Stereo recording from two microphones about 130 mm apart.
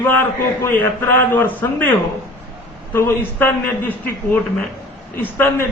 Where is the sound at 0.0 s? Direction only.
15° left (ahead or behind).